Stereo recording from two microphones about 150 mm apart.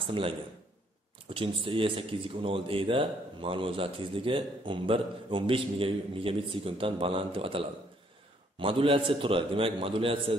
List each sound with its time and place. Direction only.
0.0 s speech: 35° right (ahead or behind)